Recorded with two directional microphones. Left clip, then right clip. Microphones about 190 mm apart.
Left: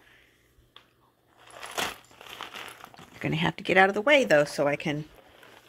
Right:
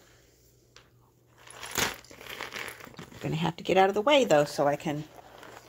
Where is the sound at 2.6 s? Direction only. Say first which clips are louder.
Right 2 dB; 15° right (ahead or behind).